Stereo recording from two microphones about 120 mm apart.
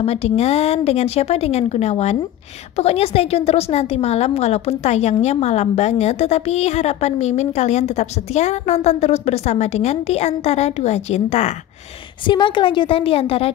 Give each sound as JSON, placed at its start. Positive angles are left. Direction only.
{"t": 0.0, "sound": "a woman's voice", "side_deg": 60}
{"t": 12.3, "sound": "a woman's voice", "side_deg": 40}